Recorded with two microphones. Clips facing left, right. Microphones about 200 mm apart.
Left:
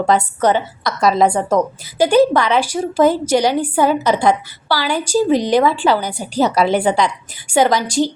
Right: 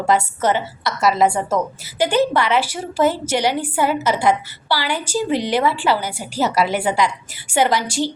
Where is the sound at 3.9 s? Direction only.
10° right (ahead or behind).